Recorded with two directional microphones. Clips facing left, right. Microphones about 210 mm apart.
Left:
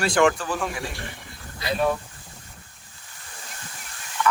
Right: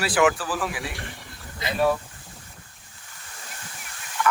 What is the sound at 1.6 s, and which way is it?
Speech, 20° right (ahead or behind).